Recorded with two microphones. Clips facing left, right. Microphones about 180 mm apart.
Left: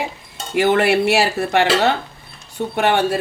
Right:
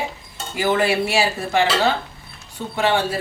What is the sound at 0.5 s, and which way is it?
Speech, 70° left (ahead or behind).